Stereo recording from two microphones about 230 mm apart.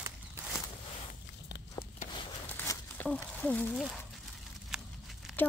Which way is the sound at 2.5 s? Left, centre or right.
Centre.